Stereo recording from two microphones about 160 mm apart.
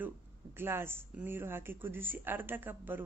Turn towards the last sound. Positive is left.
turn(degrees=-10)  # may be behind; listen again after turning